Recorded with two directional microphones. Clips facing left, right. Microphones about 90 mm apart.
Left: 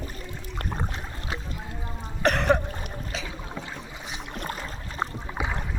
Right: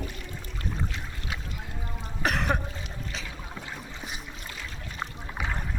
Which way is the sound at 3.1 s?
Centre (ahead or behind).